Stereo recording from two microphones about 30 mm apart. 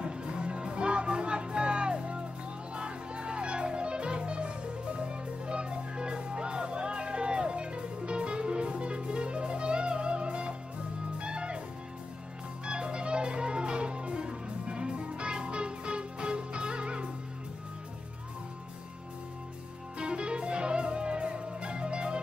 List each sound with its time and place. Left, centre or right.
0.0 s music: right
5.5 s music: right
12.6 s music: right
20.0 s music: right